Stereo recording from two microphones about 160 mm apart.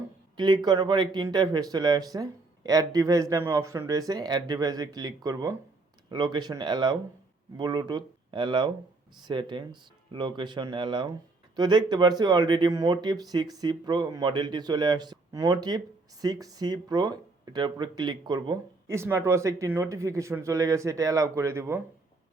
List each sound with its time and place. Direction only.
0.3 s speech: 25° right (ahead or behind)